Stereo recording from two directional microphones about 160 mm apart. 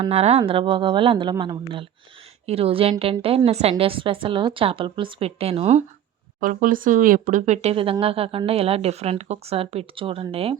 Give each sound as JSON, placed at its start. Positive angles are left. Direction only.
{"t": 0.0, "sound": "speech", "side_deg": -40}
{"t": 6.4, "sound": "speech", "side_deg": -55}